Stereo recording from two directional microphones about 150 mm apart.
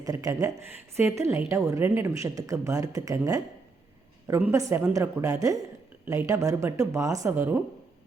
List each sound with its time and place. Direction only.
0.0 s a woman's voice: 25° right (ahead or behind)